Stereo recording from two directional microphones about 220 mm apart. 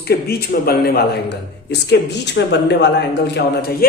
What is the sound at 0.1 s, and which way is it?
Speech, 45° left (ahead or behind).